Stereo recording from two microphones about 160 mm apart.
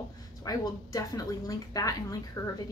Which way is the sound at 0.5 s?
20° left (ahead or behind).